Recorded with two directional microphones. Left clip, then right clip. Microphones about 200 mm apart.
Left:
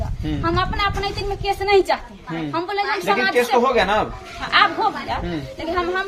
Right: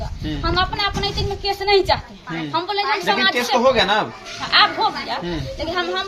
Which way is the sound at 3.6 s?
25° left (ahead or behind).